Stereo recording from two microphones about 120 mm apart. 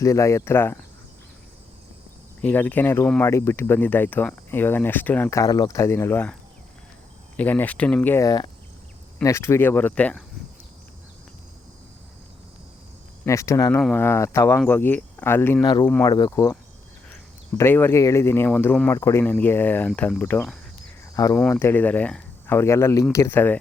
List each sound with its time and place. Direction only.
0.0 s speech: 25° left (ahead or behind)
2.4 s speech: 15° left (ahead or behind)
5.3 s speech: 30° left (ahead or behind)
7.3 s speech: 15° left (ahead or behind)
8.2 s speech: 35° left (ahead or behind)
9.2 s speech: 25° left (ahead or behind)
13.2 s speech: 25° left (ahead or behind)
13.9 s speech: 20° left (ahead or behind)
14.7 s speech: 15° left (ahead or behind)
15.6 s speech: 40° left (ahead or behind)
17.6 s speech: 20° left (ahead or behind)